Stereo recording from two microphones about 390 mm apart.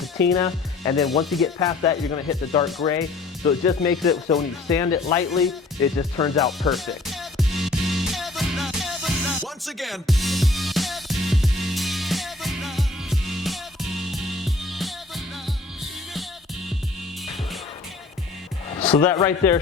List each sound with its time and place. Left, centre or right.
0.3 s speech: centre
1.0 s speech: centre
6.0 s music: centre
18.7 s a man's voice: centre